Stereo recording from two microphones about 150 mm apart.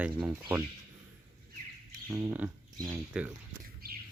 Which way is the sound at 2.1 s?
15° right (ahead or behind).